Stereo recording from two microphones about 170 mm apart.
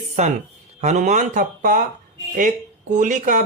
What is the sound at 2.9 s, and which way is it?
Speech, 50° right (ahead or behind).